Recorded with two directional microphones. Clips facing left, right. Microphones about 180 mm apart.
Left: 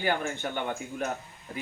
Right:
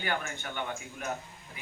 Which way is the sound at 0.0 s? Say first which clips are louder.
Left 6 dB; 35° left (ahead or behind).